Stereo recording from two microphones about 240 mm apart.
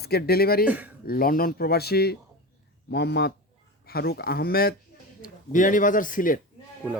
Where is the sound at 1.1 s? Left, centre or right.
Left.